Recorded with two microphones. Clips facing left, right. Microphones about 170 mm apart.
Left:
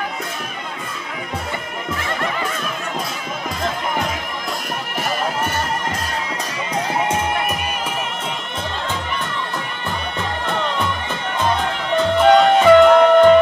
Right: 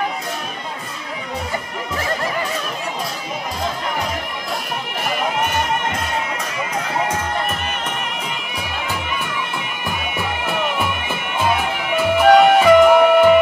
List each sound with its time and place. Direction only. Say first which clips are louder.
9.8 s music: right 1 dB; 10° right (ahead or behind)